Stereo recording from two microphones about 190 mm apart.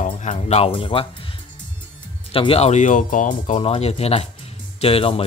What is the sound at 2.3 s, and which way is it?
Speech, 30° left (ahead or behind).